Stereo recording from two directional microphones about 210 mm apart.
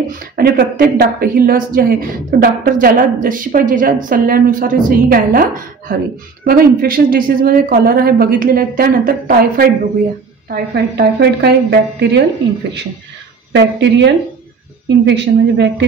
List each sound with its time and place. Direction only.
0.2 s a woman's voice: 45° right (ahead or behind)
13.5 s a woman's voice: 60° right (ahead or behind)